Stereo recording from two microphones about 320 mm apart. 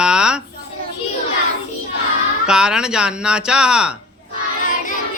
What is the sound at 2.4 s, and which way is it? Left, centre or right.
Speech, centre.